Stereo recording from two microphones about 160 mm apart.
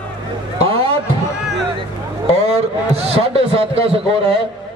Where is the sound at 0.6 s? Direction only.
35° right (ahead or behind).